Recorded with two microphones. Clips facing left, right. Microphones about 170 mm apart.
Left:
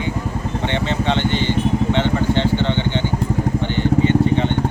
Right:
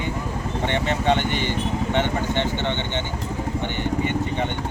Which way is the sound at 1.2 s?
10° right (ahead or behind).